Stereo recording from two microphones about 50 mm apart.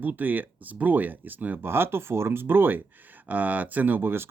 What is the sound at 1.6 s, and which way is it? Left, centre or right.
Speech, right.